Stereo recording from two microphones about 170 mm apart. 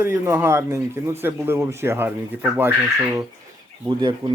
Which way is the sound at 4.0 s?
30° right (ahead or behind).